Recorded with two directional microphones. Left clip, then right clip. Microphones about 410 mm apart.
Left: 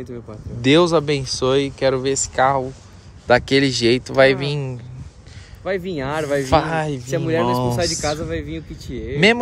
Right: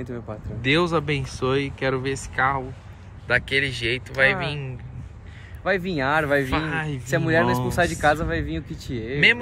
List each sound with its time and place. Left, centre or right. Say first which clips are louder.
0.1 s speech: even; centre
5.6 s speech: even; centre